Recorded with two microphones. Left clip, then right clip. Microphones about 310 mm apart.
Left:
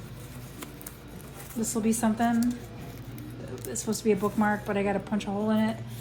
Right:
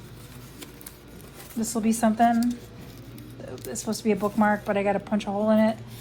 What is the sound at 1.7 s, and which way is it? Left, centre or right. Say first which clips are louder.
Speech: right 4 dB; right.